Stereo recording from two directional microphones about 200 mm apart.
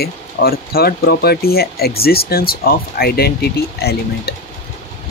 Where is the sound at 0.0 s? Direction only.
50° left (ahead or behind).